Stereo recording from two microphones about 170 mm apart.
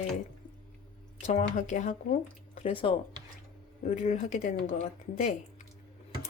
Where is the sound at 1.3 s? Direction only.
40° left (ahead or behind).